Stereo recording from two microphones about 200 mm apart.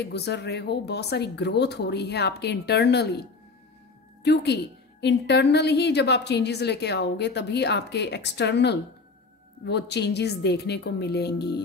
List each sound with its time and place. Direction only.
0.0 s a woman's voice: 55° left (ahead or behind)